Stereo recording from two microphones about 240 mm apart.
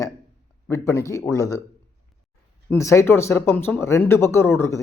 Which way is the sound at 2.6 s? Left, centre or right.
Centre.